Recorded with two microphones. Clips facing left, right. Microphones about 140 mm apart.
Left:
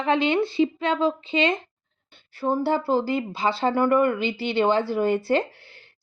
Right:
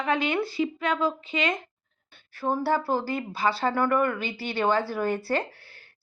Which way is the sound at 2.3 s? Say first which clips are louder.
Left 2 dB; 15° left (ahead or behind).